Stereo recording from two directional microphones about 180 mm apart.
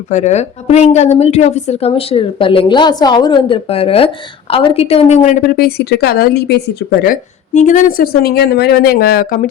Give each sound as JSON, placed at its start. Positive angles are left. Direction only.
{"t": 0.1, "sound": "a woman's voice", "side_deg": 40}